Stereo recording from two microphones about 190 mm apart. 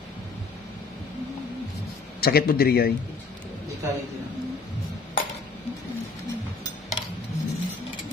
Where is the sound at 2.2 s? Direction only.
55° left (ahead or behind).